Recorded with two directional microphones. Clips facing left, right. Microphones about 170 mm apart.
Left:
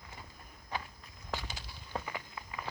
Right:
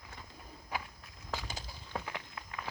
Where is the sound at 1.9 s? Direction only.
5° left (ahead or behind).